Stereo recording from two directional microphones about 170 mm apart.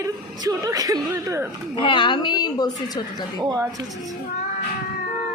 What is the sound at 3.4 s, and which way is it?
Speech, 20° right (ahead or behind).